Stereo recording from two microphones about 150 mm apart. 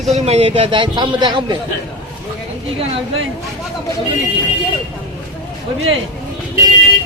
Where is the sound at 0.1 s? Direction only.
45° right (ahead or behind); by 1.5 s 30° right (ahead or behind).